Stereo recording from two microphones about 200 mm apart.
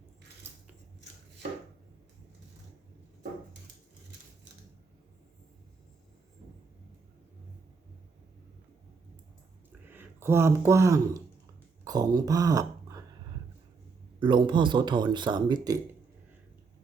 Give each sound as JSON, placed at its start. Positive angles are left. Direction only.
{"t": 9.9, "sound": "speech", "side_deg": -10}
{"t": 14.2, "sound": "speech", "side_deg": -25}